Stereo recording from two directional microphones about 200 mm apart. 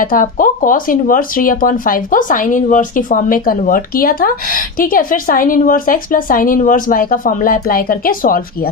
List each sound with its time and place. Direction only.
0.0 s speech: 45° left (ahead or behind)